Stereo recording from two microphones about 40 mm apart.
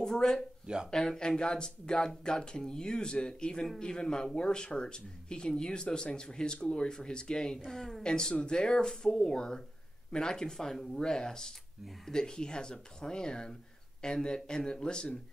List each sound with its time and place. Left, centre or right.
0.0 s speech: centre
8.0 s speech: centre